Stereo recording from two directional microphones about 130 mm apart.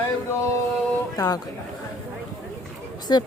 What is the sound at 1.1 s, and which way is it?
Speech, 30° left (ahead or behind).